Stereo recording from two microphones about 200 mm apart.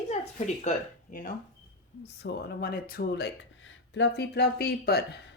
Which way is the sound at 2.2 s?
50° left (ahead or behind).